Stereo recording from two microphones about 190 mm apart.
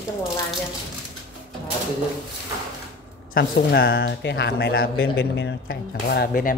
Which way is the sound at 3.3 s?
55° left (ahead or behind).